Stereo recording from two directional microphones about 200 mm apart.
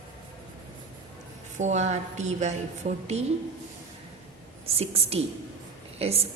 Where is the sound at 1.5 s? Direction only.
35° right (ahead or behind).